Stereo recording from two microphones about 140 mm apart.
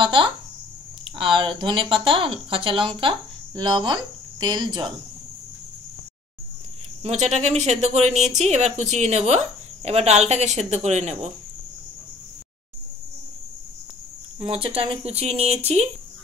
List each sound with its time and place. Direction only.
0.0 s speech: 35° right (ahead or behind)
7.0 s speech: 50° right (ahead or behind)
14.4 s speech: 40° right (ahead or behind)